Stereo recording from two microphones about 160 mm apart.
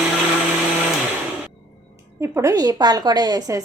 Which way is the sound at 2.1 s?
15° right (ahead or behind).